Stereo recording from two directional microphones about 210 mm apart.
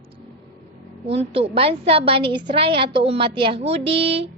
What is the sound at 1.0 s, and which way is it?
A woman's voice, 25° right (ahead or behind).